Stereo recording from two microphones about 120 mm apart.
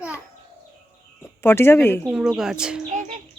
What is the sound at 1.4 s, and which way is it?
Speech, 20° left (ahead or behind).